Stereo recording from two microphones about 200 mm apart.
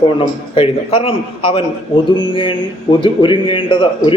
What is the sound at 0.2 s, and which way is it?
A man's voice, 25° left (ahead or behind).